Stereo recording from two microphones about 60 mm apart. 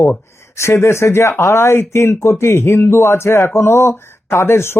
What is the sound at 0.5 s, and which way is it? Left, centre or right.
Speech, left.